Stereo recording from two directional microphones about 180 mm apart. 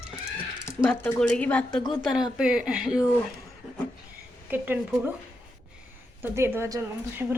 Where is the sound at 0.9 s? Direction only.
5° left (ahead or behind).